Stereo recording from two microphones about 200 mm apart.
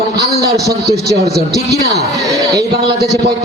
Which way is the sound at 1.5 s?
55° right (ahead or behind).